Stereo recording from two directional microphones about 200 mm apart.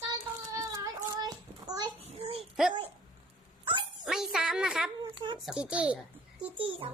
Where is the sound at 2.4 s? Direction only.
Centre (ahead or behind).